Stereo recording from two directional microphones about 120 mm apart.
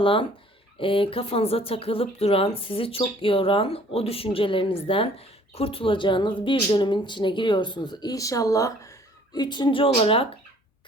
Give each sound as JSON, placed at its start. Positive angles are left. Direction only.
{"t": 0.0, "sound": "speech", "side_deg": 45}